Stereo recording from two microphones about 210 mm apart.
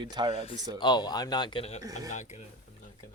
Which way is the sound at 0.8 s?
20° left (ahead or behind).